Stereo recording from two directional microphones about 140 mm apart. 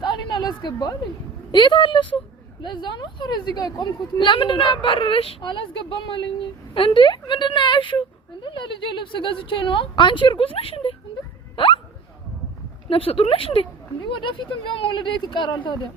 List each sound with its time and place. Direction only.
0.0 s a sound: 35° left (ahead or behind)
1.5 s a woman's voice: 35° left (ahead or behind)
11.5 s hiccup: 40° left (ahead or behind)
12.9 s a woman's voice: 40° left (ahead or behind)